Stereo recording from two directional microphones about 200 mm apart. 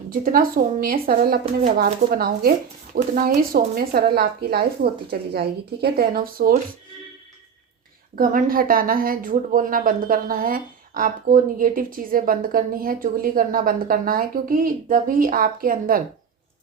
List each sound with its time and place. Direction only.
0.1 s speech: 45° right (ahead or behind)
8.1 s speech: 40° right (ahead or behind)